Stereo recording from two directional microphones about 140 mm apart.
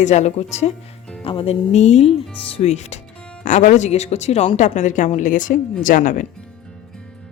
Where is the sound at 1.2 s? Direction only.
40° left (ahead or behind).